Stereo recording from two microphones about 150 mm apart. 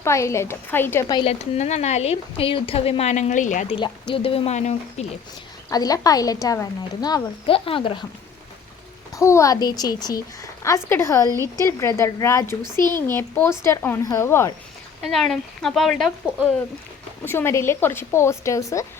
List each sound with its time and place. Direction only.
0.0 s speech: 20° left (ahead or behind)
1.2 s speech: 45° left (ahead or behind)
3.7 s speech: 35° left (ahead or behind)
5.7 s a woman's voice: 25° left (ahead or behind)
9.1 s a woman's voice: 20° left (ahead or behind)
11.3 s a woman's voice: 25° right (ahead or behind)
11.6 s a woman's voice: 15° left (ahead or behind)
15.0 s speech: centre (ahead or behind)
17.2 s speech: 15° left (ahead or behind)